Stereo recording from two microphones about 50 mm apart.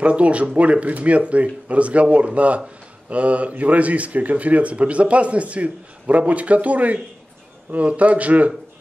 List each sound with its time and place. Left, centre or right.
0.0 s speech: right